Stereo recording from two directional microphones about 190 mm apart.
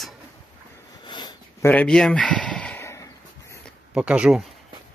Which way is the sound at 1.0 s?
20° left (ahead or behind).